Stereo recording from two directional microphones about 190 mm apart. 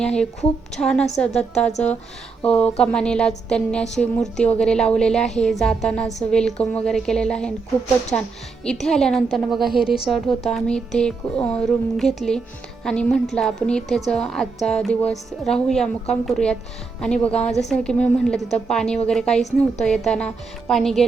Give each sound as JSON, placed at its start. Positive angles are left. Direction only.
{"t": 0.0, "sound": "a woman's voice", "side_deg": 5}
{"t": 8.6, "sound": "a woman's voice", "side_deg": 5}